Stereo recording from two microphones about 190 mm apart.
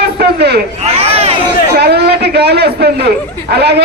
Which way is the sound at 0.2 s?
60° right (ahead or behind).